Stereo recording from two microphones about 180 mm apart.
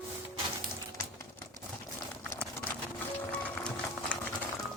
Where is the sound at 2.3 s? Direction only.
10° left (ahead or behind).